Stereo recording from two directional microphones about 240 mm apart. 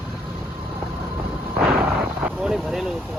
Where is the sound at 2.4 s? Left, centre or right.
Centre.